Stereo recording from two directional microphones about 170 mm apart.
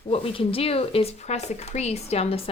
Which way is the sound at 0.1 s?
35° left (ahead or behind).